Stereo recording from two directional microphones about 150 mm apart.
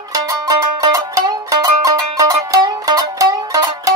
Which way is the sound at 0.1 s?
20° right (ahead or behind).